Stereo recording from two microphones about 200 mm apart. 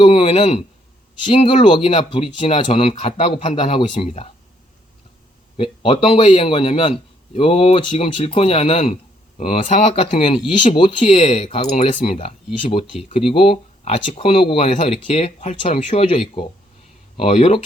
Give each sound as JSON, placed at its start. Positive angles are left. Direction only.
{"t": 0.0, "sound": "a sound", "side_deg": 25}
{"t": 1.2, "sound": "speech", "side_deg": 25}
{"t": 5.5, "sound": "speech", "side_deg": 25}